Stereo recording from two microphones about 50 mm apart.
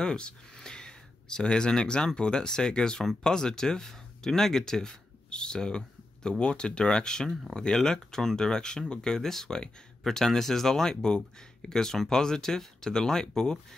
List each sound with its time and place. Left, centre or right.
0.0 s speech: centre